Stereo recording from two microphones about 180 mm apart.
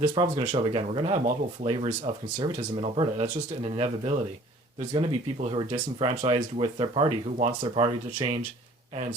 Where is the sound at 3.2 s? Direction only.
45° right (ahead or behind).